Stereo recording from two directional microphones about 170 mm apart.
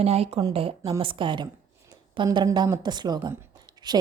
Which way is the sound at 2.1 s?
25° right (ahead or behind).